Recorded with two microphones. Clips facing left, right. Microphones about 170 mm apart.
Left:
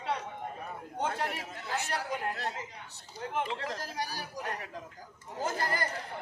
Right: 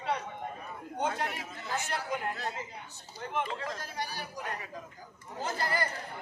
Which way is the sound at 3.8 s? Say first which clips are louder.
Left 1 dB; 40° left (ahead or behind).